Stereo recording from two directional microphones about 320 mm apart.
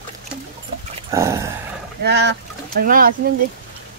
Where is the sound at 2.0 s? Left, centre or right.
Right.